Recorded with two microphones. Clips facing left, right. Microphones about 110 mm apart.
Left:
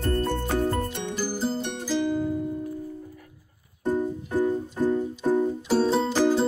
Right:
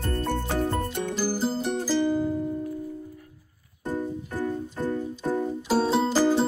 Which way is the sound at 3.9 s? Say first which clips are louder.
Left 4 dB; 15° left (ahead or behind).